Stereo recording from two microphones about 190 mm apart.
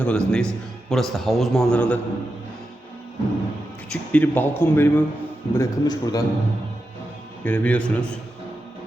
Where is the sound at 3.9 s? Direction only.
10° left (ahead or behind).